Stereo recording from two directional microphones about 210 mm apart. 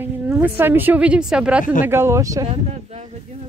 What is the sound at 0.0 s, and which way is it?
A woman's voice, 10° right (ahead or behind).